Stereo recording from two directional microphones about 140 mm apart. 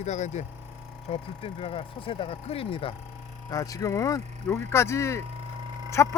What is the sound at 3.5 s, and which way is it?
Speech, 25° left (ahead or behind).